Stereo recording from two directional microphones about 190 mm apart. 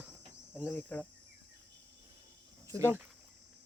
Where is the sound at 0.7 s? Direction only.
10° left (ahead or behind).